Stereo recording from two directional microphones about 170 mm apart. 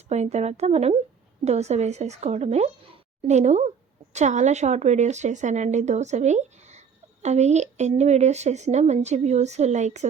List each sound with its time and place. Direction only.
0.1 s speech: 40° right (ahead or behind)